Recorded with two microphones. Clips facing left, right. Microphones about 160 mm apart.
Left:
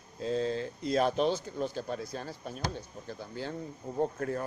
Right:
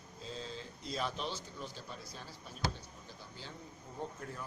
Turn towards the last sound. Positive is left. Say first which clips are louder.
# left 12 dB
turn(degrees=65)  # may be behind; listen again after turning